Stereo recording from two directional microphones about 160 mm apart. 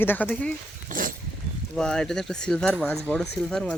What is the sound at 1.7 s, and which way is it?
Speech, 5° left (ahead or behind).